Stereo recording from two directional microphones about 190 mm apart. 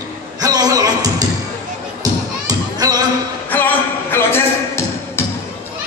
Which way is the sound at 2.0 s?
20° right (ahead or behind).